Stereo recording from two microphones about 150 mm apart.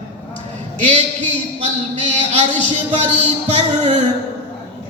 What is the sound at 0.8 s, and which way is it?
Speech, 45° right (ahead or behind).